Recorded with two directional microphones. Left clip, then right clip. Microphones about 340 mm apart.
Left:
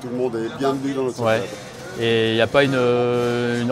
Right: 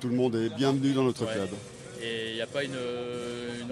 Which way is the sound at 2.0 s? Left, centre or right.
Left.